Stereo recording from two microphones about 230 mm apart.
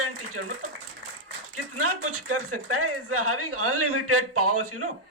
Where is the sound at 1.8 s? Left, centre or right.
Right.